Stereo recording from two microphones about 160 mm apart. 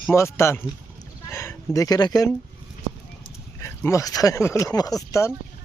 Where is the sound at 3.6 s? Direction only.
15° left (ahead or behind).